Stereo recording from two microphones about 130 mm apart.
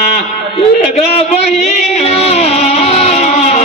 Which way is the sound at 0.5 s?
50° left (ahead or behind).